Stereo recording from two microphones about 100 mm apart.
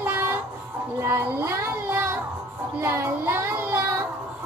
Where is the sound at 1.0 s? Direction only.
25° right (ahead or behind).